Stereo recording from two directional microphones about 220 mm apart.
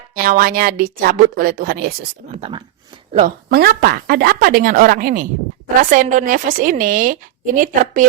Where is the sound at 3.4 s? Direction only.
45° right (ahead or behind).